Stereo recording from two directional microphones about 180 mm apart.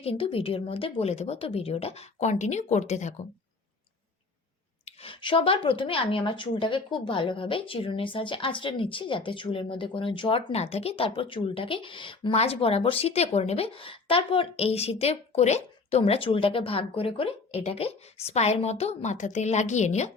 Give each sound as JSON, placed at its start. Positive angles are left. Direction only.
{"t": 0.0, "sound": "a woman's voice", "side_deg": 30}
{"t": 4.9, "sound": "a woman's voice", "side_deg": 30}